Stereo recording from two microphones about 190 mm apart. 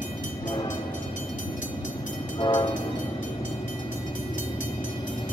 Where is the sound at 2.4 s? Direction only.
25° left (ahead or behind).